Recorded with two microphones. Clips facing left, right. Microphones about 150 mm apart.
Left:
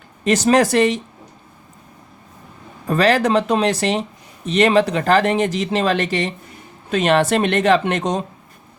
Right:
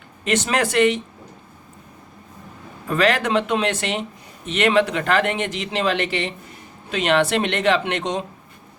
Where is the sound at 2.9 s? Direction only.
35° left (ahead or behind).